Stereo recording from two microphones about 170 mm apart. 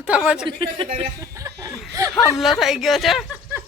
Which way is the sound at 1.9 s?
20° right (ahead or behind).